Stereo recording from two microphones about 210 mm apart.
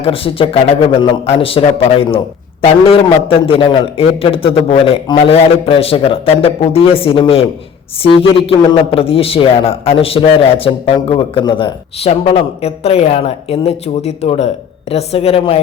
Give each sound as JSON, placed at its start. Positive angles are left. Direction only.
{"t": 0.0, "sound": "a man's voice", "side_deg": 25}